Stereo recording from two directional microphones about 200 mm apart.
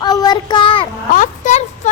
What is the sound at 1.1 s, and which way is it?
Speech, 35° left (ahead or behind).